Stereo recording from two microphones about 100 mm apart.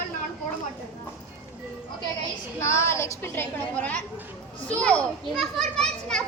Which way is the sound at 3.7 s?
15° left (ahead or behind).